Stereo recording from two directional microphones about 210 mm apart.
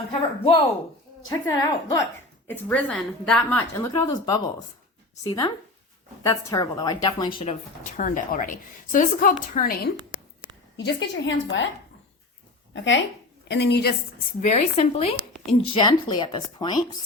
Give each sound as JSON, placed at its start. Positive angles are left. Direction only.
{"t": 0.1, "sound": "a woman's voice", "side_deg": 25}
{"t": 7.9, "sound": "a woman's voice", "side_deg": 40}
{"t": 10.1, "sound": "a sound", "side_deg": -5}
{"t": 10.8, "sound": "a woman's voice", "side_deg": 60}
{"t": 12.7, "sound": "a woman's voice", "side_deg": 60}
{"t": 14.4, "sound": "speech", "side_deg": 30}